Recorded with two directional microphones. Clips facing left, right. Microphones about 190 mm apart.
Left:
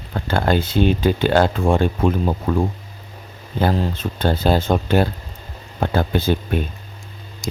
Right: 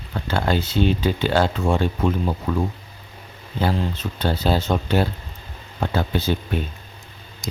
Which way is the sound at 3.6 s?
45° left (ahead or behind).